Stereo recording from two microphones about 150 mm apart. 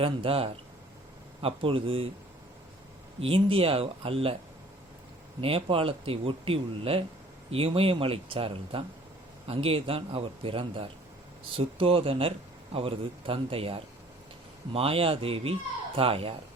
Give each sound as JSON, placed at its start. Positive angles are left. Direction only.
{"t": 0.0, "sound": "speech", "side_deg": -40}
{"t": 3.2, "sound": "speech", "side_deg": -40}
{"t": 5.4, "sound": "speech", "side_deg": -40}